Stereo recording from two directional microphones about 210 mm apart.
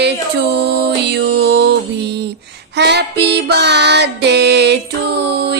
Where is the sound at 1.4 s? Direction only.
50° right (ahead or behind).